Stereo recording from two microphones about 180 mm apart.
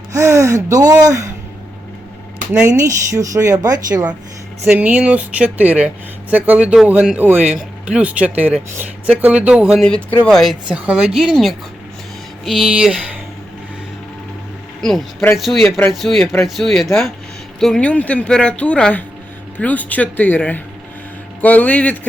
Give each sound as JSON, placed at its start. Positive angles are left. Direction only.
{"t": 0.1, "sound": "speech", "side_deg": -15}
{"t": 2.5, "sound": "speech", "side_deg": -15}
{"t": 4.6, "sound": "speech", "side_deg": -10}
{"t": 14.8, "sound": "speech", "side_deg": 0}